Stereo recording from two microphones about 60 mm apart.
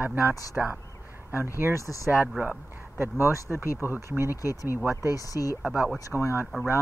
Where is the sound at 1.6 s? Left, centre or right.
Right.